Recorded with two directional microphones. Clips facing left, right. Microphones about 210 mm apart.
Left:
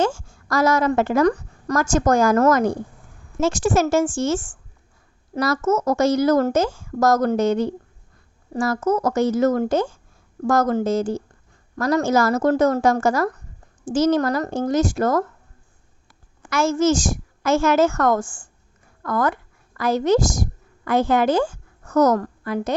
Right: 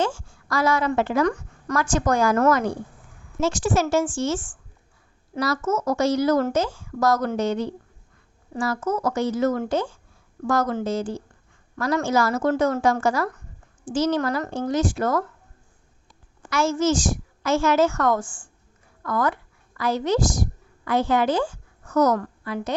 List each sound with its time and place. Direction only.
0.0 s a woman's voice: 45° left (ahead or behind)
16.5 s a woman's voice: 45° left (ahead or behind)